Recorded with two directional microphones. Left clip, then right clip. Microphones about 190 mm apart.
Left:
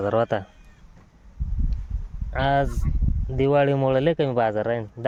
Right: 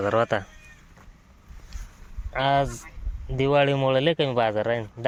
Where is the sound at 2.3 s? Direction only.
25° left (ahead or behind).